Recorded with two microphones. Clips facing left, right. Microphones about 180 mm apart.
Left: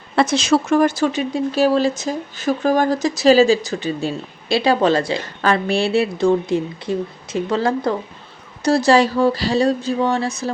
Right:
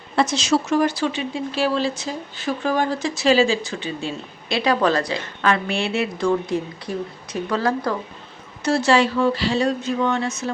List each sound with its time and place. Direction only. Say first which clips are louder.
0.2 s speech: left 3 dB; 55° left (ahead or behind); by 7.9 s 25° left (ahead or behind)
8.6 s speech: left 4 dB; 35° left (ahead or behind)